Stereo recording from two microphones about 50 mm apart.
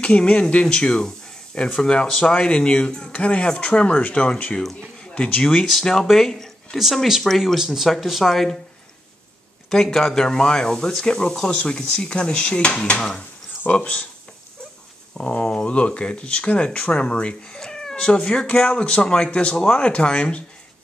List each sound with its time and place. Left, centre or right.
0.0 s a man's voice: left
5.5 s speech: centre
6.8 s speech: centre
9.7 s speech: centre
15.1 s speech: centre